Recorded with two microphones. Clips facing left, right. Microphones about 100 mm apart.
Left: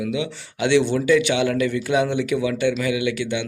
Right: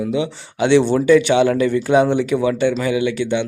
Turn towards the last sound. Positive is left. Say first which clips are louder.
# right 5 dB
turn(degrees=-30)  # may be behind; listen again after turning